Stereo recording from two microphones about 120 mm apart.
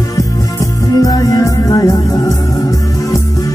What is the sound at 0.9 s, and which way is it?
Music, 30° left (ahead or behind).